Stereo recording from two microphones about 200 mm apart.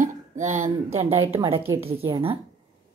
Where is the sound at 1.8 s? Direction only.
30° right (ahead or behind).